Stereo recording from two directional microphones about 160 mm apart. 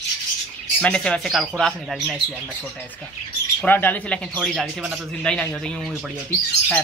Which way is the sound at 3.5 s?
10° left (ahead or behind).